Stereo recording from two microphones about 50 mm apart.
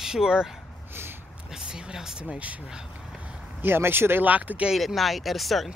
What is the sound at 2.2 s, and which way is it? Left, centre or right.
Speech, right.